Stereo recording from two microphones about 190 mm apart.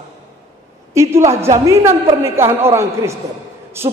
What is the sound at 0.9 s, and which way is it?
A man's voice, 15° right (ahead or behind).